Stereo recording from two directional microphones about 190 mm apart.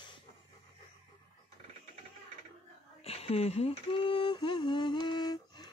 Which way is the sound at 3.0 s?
30° left (ahead or behind).